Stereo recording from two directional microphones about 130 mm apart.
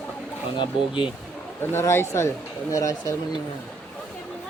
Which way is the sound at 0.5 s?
40° left (ahead or behind).